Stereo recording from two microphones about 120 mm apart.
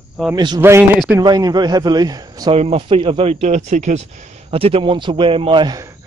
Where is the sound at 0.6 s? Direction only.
20° right (ahead or behind).